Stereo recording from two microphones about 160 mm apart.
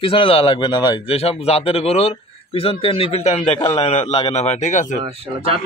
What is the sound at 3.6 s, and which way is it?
Speech, 20° left (ahead or behind).